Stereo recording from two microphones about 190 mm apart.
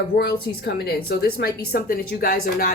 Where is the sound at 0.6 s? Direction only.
55° left (ahead or behind).